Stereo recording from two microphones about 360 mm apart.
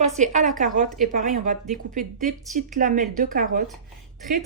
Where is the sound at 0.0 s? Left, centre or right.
Centre.